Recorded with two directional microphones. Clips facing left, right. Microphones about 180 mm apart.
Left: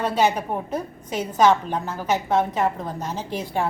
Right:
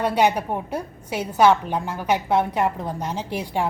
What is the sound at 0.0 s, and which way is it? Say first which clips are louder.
A woman's voice: right 1 dB; 15° right (ahead or behind).